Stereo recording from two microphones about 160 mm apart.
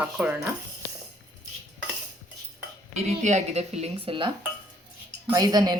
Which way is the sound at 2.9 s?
45° right (ahead or behind).